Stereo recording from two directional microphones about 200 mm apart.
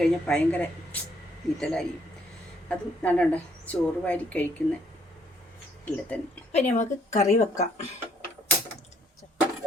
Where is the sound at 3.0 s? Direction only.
5° left (ahead or behind).